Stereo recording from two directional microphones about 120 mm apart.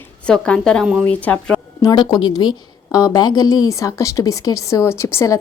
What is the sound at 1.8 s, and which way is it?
A woman's voice, 35° left (ahead or behind).